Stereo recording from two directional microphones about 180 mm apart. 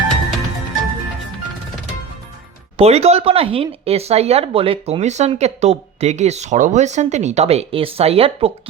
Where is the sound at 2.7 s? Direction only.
35° right (ahead or behind).